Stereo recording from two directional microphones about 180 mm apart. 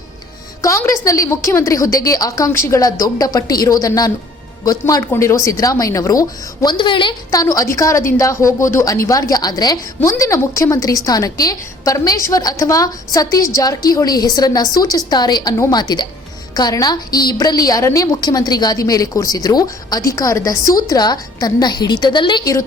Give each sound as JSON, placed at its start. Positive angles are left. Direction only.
{"t": 0.6, "sound": "a woman's voice", "side_deg": 20}